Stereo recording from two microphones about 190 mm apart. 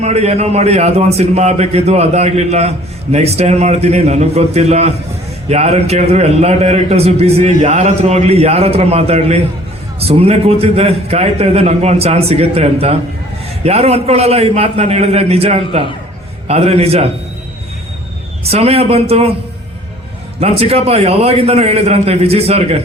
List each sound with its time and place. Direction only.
0.0 s a man's voice: 35° right (ahead or behind)
18.4 s a man's voice: 30° right (ahead or behind)
20.4 s a man's voice: 30° right (ahead or behind)